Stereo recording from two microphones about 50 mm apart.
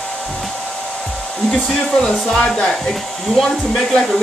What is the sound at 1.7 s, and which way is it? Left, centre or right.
Speech, centre.